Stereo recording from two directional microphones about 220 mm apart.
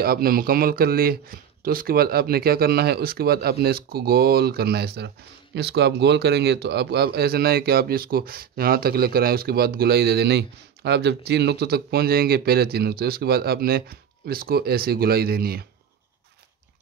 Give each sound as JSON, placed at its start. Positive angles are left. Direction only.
{"t": 0.0, "sound": "speech", "side_deg": -45}